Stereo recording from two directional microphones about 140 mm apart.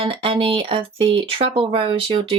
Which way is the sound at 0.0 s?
40° right (ahead or behind).